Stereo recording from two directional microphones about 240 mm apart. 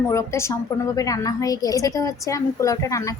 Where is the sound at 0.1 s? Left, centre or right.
Centre.